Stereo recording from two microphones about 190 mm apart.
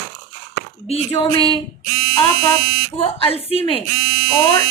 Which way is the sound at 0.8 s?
30° left (ahead or behind).